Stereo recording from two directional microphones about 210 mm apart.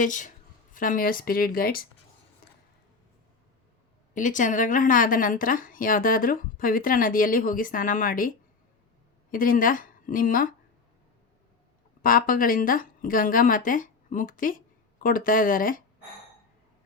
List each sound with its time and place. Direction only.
0.0 s speech: 35° left (ahead or behind)
4.1 s speech: 35° left (ahead or behind)
9.3 s a woman's voice: 40° left (ahead or behind)
12.0 s speech: 40° left (ahead or behind)